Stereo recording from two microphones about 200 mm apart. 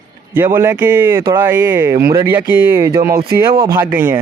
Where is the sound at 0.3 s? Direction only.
10° right (ahead or behind).